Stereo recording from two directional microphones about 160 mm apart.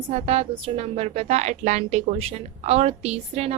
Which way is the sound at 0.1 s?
40° right (ahead or behind).